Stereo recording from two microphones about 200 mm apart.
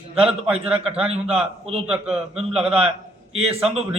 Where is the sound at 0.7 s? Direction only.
30° right (ahead or behind).